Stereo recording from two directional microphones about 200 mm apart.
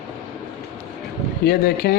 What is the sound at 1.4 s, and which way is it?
Speech, 50° left (ahead or behind).